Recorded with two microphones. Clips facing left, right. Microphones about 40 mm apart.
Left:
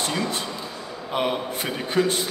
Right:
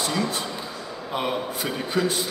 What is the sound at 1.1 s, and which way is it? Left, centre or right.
Speech, left.